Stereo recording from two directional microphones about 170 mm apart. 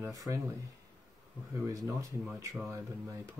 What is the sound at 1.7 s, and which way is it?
Speech, 20° right (ahead or behind).